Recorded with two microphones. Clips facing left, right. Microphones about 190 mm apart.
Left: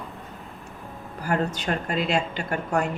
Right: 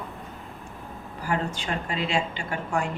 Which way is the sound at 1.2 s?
40° left (ahead or behind).